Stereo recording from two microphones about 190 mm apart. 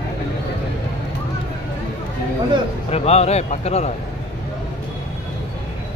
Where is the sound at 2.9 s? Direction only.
35° left (ahead or behind).